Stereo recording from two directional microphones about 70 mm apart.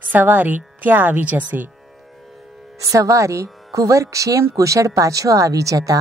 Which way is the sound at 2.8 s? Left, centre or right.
Right.